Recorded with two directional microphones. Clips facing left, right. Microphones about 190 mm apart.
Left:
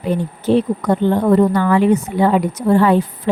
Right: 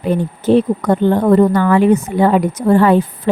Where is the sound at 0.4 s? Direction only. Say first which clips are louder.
Right 3 dB; 50° right (ahead or behind).